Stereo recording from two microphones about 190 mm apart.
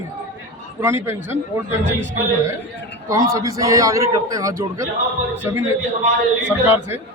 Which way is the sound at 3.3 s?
15° right (ahead or behind).